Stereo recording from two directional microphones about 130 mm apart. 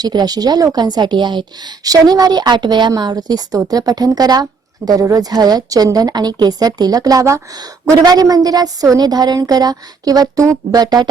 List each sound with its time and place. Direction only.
0.0 s a woman's voice: 30° right (ahead or behind)